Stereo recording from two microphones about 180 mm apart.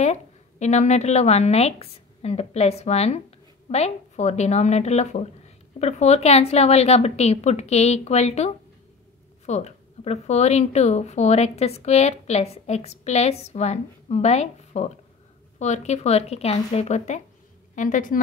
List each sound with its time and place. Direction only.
0.0 s a woman's voice: 40° left (ahead or behind)
9.5 s a woman's voice: 35° left (ahead or behind)